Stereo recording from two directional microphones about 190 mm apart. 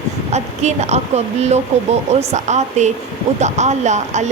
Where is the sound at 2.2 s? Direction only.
35° right (ahead or behind).